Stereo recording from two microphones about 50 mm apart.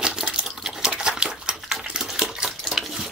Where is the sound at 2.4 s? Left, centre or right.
Centre.